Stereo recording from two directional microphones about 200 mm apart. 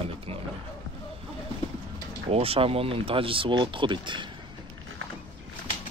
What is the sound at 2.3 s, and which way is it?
Speech, 30° right (ahead or behind).